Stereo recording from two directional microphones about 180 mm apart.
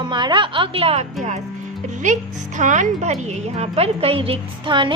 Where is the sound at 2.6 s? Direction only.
45° right (ahead or behind); by 4.9 s 25° right (ahead or behind).